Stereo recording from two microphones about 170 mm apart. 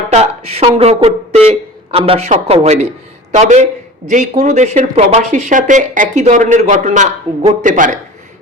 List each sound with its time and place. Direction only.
0.1 s a woman's voice: 35° right (ahead or behind)